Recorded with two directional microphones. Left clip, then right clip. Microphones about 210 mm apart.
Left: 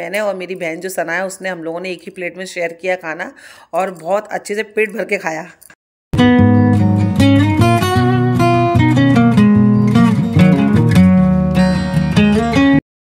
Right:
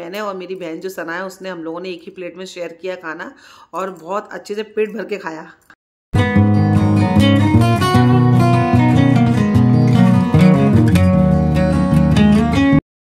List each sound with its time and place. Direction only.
0.0 s speech: 10° left (ahead or behind)
6.1 s music: centre (ahead or behind)